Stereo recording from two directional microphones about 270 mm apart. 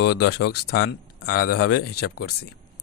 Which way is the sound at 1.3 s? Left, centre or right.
Left.